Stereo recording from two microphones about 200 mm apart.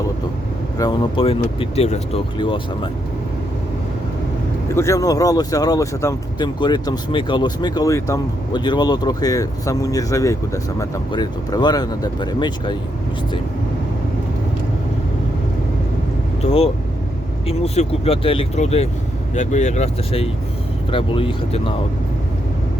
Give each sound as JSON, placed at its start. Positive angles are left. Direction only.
{"t": 0.8, "sound": "speech", "side_deg": 25}
{"t": 4.7, "sound": "speech", "side_deg": 15}
{"t": 16.4, "sound": "speech", "side_deg": 30}